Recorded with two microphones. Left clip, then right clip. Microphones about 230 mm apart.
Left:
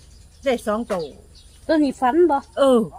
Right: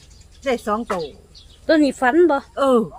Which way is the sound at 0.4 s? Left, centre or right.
Centre.